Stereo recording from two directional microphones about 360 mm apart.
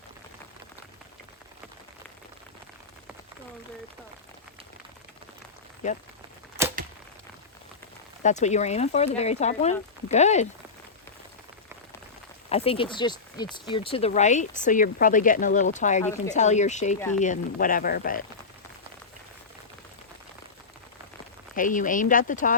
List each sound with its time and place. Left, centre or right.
8.2 s speech: centre
12.5 s speech: centre
21.5 s speech: left